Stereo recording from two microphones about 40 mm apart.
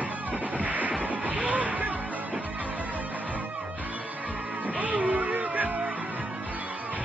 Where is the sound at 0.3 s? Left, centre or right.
Right.